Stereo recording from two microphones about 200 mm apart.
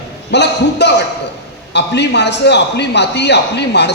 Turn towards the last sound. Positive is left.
turn(degrees=60)  # may be behind; listen again after turning